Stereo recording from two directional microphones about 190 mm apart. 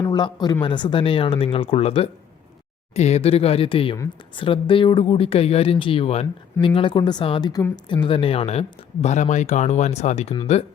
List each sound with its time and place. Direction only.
0.0 s speech: 20° left (ahead or behind)